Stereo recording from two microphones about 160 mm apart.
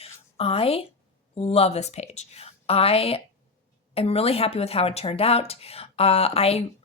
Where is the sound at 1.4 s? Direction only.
40° left (ahead or behind).